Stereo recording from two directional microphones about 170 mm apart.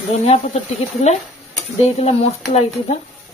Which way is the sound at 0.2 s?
40° left (ahead or behind).